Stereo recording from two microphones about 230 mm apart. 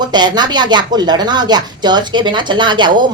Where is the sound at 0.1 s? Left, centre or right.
Centre.